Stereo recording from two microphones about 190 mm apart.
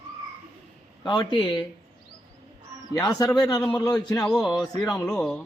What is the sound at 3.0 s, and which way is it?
A man's voice, 15° left (ahead or behind).